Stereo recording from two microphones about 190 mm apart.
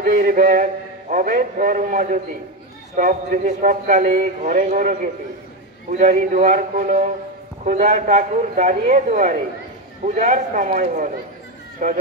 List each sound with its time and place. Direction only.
0.0 s a man's voice: 45° right (ahead or behind)